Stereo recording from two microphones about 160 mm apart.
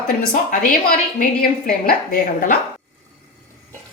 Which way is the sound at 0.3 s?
65° left (ahead or behind).